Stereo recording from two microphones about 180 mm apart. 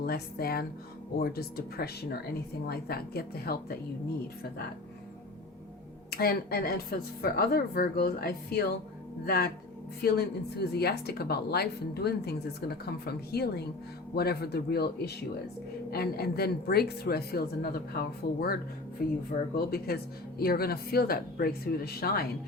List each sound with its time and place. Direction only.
0.0 s a woman's voice: 55° left (ahead or behind)
6.1 s a woman's voice: 60° left (ahead or behind)